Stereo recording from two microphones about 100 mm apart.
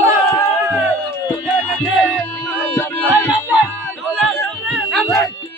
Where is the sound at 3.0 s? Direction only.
20° right (ahead or behind).